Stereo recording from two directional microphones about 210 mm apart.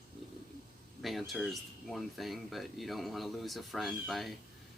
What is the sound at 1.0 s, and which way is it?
Speech, centre (ahead or behind).